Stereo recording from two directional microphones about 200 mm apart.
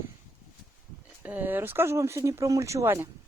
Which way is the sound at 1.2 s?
10° right (ahead or behind).